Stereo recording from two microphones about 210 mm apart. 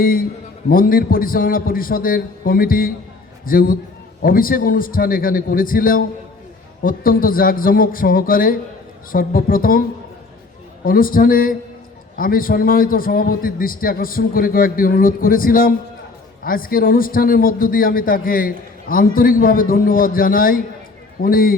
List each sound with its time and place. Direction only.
0.0 s a man's voice: 45° left (ahead or behind)
10.8 s a man's voice: 45° left (ahead or behind)